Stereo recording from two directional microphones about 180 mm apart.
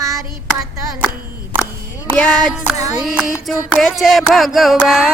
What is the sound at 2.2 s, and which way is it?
Music, 10° left (ahead or behind).